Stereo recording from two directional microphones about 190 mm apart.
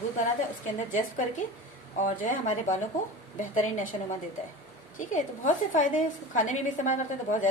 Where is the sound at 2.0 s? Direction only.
45° left (ahead or behind).